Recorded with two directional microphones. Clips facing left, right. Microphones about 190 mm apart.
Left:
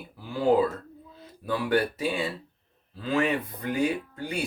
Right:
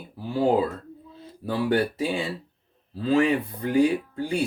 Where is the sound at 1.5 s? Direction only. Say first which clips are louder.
Right 3 dB; 30° right (ahead or behind).